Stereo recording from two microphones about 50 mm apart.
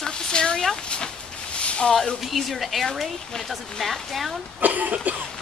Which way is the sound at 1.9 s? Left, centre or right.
Centre.